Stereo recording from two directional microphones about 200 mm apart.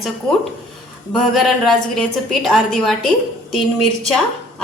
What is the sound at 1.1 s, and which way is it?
A woman's voice, centre (ahead or behind).